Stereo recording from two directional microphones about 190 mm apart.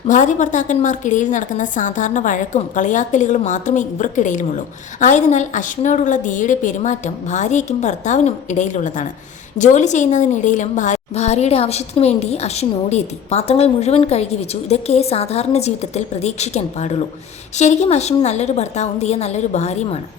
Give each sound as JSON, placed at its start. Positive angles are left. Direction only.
{"t": 0.1, "sound": "a woman's voice", "side_deg": 40}